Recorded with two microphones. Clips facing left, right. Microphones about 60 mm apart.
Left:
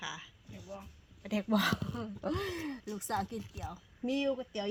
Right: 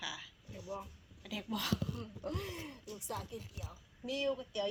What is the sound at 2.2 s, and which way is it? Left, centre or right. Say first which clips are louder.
Speech: left 7 dB; left.